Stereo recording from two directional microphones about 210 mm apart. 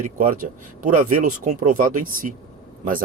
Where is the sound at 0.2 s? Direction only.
35° right (ahead or behind).